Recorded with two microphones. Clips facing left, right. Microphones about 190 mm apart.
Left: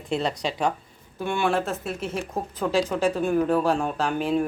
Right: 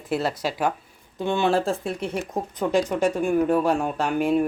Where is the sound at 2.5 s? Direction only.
15° right (ahead or behind).